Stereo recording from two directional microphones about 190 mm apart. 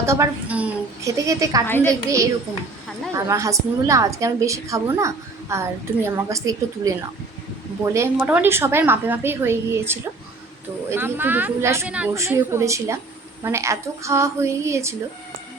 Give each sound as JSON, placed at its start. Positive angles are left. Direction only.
{"t": 0.0, "sound": "a woman's voice", "side_deg": -15}
{"t": 1.2, "sound": "a woman's voice", "side_deg": -20}
{"t": 1.6, "sound": "a woman's voice", "side_deg": 10}
{"t": 2.0, "sound": "a woman's voice", "side_deg": -15}
{"t": 7.9, "sound": "a woman's voice", "side_deg": -10}